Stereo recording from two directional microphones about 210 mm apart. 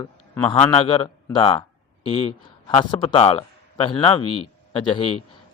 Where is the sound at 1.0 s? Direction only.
20° left (ahead or behind).